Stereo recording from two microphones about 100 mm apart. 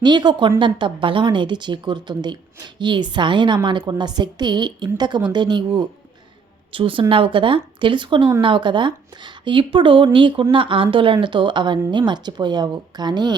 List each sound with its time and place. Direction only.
0.0 s speech: 45° right (ahead or behind)
6.7 s speech: 60° right (ahead or behind); by 13.3 s 45° right (ahead or behind)